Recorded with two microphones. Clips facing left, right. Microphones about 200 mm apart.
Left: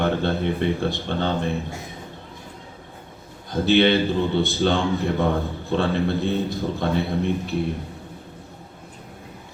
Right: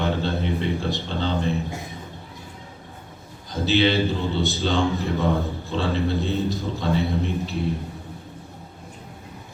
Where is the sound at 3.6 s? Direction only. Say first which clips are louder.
Left 2 dB; 55° left (ahead or behind).